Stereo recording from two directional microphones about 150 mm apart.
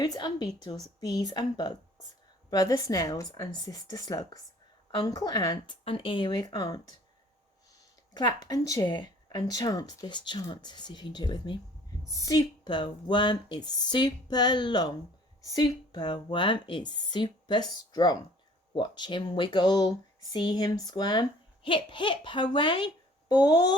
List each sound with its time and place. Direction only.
0.0 s speech: 25° left (ahead or behind)
8.1 s speech: 25° left (ahead or behind)